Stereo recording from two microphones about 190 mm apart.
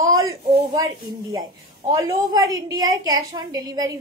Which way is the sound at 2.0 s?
15° right (ahead or behind).